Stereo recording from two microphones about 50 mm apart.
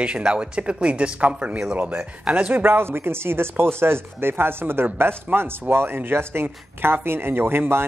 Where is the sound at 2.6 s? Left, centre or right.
Right.